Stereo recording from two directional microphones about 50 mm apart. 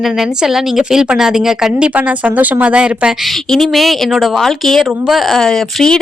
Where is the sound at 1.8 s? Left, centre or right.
Right.